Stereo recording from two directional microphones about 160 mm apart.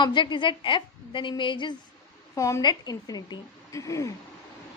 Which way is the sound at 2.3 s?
20° left (ahead or behind).